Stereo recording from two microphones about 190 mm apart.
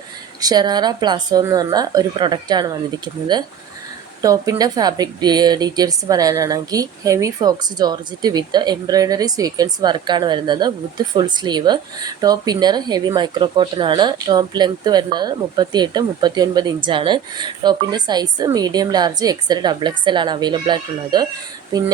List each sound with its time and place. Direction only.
0.4 s speech: 20° right (ahead or behind)
4.2 s speech: 20° right (ahead or behind)